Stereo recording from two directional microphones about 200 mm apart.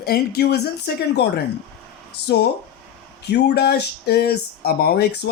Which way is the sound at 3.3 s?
55° left (ahead or behind).